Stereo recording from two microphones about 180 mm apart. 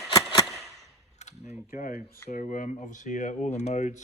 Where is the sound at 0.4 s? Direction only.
Centre (ahead or behind).